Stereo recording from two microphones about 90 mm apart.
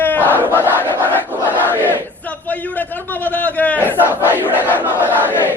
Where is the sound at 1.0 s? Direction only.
20° left (ahead or behind).